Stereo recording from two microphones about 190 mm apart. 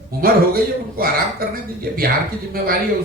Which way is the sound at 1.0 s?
50° right (ahead or behind).